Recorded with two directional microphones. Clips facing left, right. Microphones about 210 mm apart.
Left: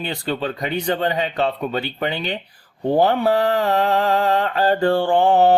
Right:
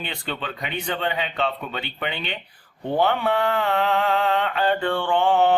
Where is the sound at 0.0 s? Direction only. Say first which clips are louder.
Left 7 dB; 40° left (ahead or behind).